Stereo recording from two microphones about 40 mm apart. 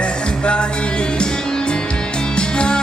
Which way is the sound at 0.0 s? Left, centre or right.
Left.